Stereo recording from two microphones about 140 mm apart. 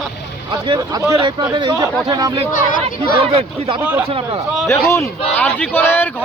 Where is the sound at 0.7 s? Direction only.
25° right (ahead or behind).